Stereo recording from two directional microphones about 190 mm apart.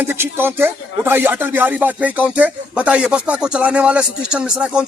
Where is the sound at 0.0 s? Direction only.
10° right (ahead or behind).